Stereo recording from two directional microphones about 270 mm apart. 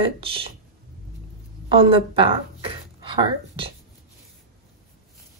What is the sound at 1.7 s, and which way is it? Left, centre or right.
A woman's voice, centre.